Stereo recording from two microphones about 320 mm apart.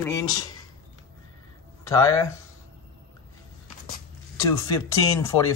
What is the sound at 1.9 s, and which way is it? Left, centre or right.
Speech, centre.